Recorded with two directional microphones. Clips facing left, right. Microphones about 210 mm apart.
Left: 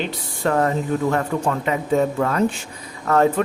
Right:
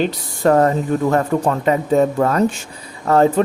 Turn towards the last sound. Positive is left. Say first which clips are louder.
# right 3 dB
turn(degrees=-30)  # may be behind; listen again after turning